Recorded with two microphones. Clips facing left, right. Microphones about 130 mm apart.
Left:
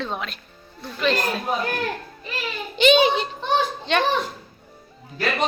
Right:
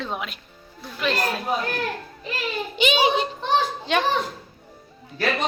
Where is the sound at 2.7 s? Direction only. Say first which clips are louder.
Left 4 dB; 5° right (ahead or behind).